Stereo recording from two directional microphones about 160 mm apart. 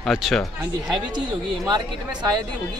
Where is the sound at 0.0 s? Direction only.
Centre (ahead or behind).